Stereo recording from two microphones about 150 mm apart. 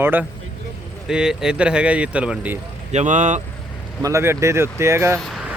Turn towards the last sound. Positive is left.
turn(degrees=0)  # may be behind; listen again after turning